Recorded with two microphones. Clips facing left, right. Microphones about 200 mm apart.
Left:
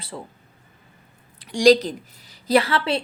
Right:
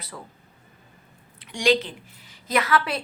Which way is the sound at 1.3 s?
35° left (ahead or behind).